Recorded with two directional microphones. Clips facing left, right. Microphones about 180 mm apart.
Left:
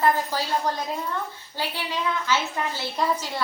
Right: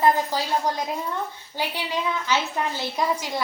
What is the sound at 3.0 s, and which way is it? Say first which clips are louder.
Speech: even; 10° right (ahead or behind).